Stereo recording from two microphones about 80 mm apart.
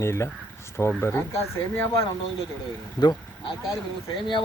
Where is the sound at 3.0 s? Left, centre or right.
Left.